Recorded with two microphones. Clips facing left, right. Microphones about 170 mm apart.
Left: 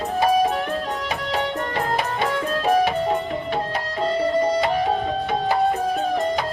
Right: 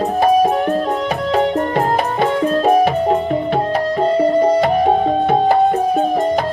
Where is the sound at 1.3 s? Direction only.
35° right (ahead or behind).